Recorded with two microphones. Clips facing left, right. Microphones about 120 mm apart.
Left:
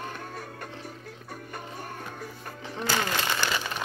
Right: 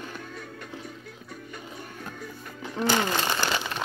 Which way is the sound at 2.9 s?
20° right (ahead or behind).